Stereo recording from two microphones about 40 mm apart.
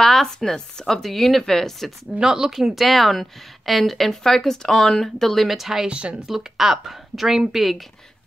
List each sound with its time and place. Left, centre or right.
0.0 s speech: centre
2.1 s speech: centre
2.5 s a woman's voice: centre
5.4 s speech: centre
5.9 s speech: right
6.2 s speech: centre